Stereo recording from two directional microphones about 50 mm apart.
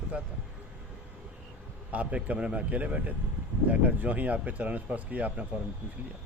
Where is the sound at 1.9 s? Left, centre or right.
Right.